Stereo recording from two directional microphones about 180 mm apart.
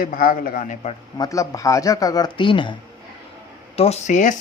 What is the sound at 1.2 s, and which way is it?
Speech, 20° left (ahead or behind).